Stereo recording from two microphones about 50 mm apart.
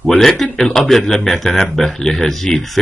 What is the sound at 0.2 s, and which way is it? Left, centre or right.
Speech, centre.